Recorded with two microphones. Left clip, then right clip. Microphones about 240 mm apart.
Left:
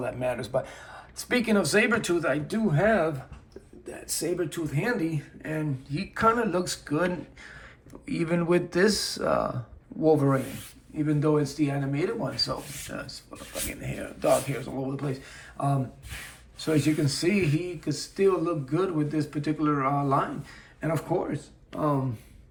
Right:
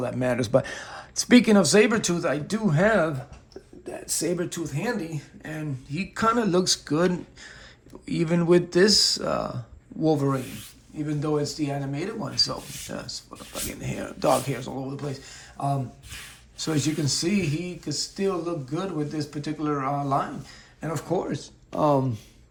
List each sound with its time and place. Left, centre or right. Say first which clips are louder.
0.0 s speech: right 3 dB; right
2.6 s speech: right 2 dB; right
4.4 s speech: even; centre